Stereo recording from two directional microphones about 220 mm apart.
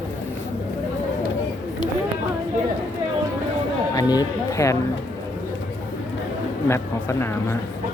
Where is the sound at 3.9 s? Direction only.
15° left (ahead or behind).